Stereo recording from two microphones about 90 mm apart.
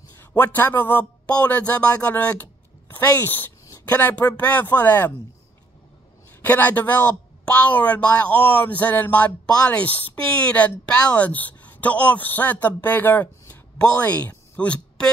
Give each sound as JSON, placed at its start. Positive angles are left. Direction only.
{"t": 0.3, "sound": "speech", "side_deg": 20}
{"t": 6.4, "sound": "a woman's voice", "side_deg": 20}